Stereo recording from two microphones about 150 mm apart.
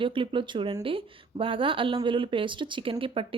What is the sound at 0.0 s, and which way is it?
Speech, 35° right (ahead or behind).